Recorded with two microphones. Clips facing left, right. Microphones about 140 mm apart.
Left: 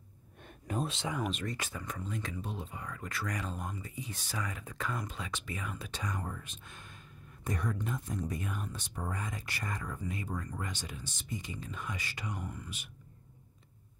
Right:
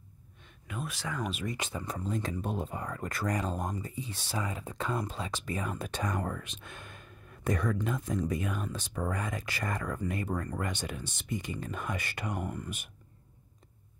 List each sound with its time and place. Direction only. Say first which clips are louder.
0.4 s a sound: left 4 dB; 45° left (ahead or behind)
0.9 s speech: left 1 dB; 20° left (ahead or behind)
1.2 s speech: right 1 dB; 10° right (ahead or behind)
1.6 s speech: right 4 dB; 25° right (ahead or behind)
2.4 s speech: right 7 dB; 50° right (ahead or behind)